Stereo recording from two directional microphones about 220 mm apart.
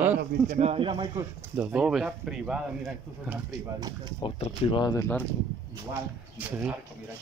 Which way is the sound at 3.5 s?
15° right (ahead or behind).